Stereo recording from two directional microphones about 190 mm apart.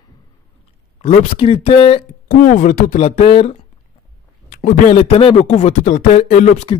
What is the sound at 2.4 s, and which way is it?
Speech, 40° left (ahead or behind).